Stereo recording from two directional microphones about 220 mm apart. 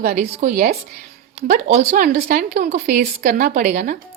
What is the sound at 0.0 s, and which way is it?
Speech, 45° right (ahead or behind).